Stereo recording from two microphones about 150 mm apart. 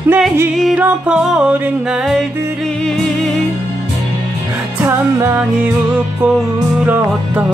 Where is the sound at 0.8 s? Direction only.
10° right (ahead or behind).